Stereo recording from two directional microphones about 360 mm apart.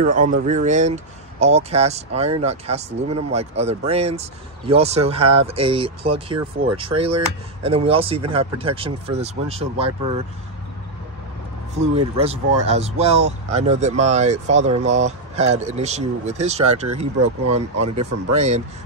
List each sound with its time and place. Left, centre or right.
0.0 s speech: right
11.7 s speech: centre
17.8 s speech: right